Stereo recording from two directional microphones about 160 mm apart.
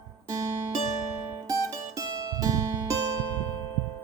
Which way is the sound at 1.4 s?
20° right (ahead or behind).